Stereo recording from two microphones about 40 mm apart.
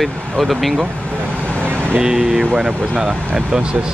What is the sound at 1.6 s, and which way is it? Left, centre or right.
Vehicle, right.